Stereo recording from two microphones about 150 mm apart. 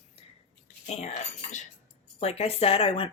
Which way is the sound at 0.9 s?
50° left (ahead or behind).